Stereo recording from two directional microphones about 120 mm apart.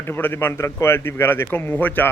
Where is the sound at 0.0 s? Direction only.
15° left (ahead or behind).